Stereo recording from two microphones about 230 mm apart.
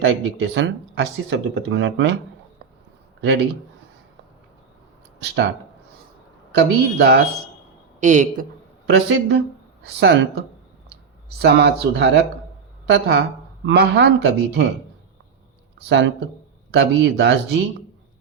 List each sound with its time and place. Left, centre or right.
0.0 s speech: right
5.2 s speech: right
6.6 s speech: right
8.0 s speech: right
8.9 s a woman's voice: right
15.9 s speech: right